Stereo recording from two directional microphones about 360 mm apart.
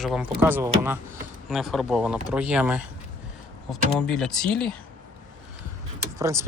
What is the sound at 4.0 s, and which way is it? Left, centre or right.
Speech, centre.